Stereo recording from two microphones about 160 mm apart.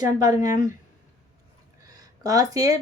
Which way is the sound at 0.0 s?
20° right (ahead or behind).